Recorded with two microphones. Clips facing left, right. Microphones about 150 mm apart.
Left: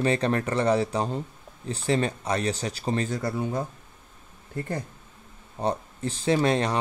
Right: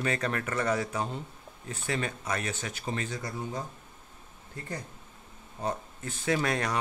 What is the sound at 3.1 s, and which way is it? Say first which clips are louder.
Speech: left 8 dB; 60° left (ahead or behind).